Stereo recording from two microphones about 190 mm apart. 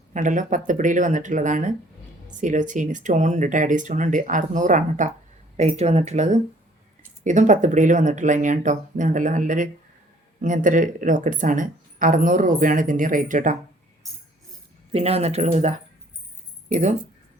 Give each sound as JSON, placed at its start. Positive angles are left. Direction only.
{"t": 0.1, "sound": "speech", "side_deg": -40}
{"t": 14.9, "sound": "speech", "side_deg": -35}